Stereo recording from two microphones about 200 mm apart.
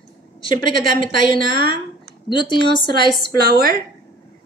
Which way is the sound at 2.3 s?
25° left (ahead or behind).